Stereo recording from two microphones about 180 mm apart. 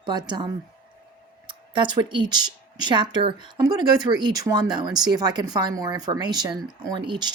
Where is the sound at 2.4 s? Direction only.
25° right (ahead or behind).